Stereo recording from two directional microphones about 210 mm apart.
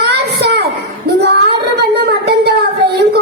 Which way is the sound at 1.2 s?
50° right (ahead or behind).